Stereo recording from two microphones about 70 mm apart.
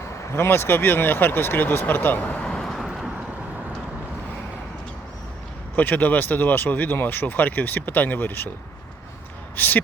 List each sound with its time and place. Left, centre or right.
0.3 s speech: left
2.4 s vehicle: centre
5.7 s speech: left
9.6 s speech: left